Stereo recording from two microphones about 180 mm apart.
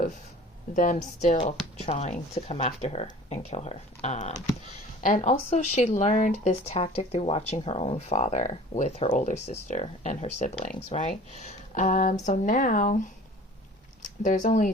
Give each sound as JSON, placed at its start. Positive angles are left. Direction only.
{"t": 0.8, "sound": "speech", "side_deg": 45}
{"t": 14.2, "sound": "speech", "side_deg": 45}